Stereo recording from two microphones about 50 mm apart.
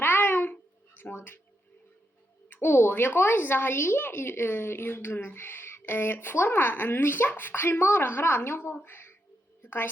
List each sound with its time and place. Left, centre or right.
0.0 s babbling: left
1.1 s speech: left
2.5 s a woman's voice: left